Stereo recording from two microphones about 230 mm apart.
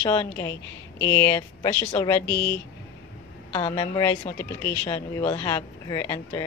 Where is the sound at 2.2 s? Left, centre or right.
Left.